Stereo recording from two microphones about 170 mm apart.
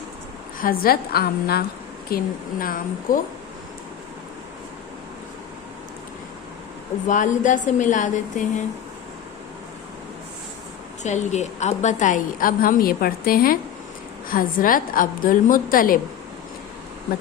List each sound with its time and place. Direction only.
0.6 s a woman's voice: 60° left (ahead or behind)
7.1 s a woman's voice: 50° left (ahead or behind)
11.0 s a woman's voice: 45° left (ahead or behind)